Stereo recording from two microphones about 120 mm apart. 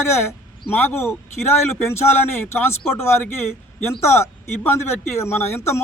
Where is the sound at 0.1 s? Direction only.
20° left (ahead or behind).